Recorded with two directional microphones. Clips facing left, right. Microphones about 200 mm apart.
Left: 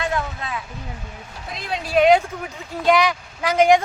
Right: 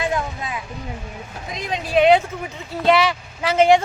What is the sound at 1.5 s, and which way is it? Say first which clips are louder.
Speech: right 1 dB; 10° left (ahead or behind).